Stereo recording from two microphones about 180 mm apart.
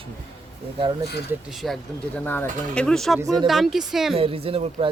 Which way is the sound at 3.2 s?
20° right (ahead or behind).